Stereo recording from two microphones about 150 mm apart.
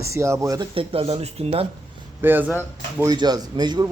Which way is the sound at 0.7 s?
40° right (ahead or behind).